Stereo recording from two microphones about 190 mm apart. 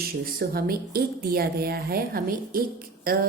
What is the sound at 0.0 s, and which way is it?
Speech, 55° right (ahead or behind).